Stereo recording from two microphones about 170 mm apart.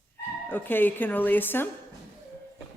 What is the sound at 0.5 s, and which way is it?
A man's voice, 10° left (ahead or behind).